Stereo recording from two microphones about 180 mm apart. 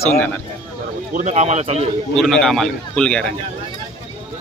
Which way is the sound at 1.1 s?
40° right (ahead or behind).